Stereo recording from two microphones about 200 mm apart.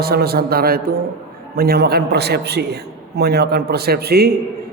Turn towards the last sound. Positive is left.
turn(degrees=-50)  # may be behind; listen again after turning